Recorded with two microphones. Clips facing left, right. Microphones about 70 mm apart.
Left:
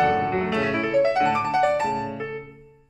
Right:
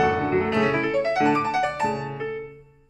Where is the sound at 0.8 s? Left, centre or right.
Centre.